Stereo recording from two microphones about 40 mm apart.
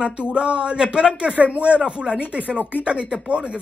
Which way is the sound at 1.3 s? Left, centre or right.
Right.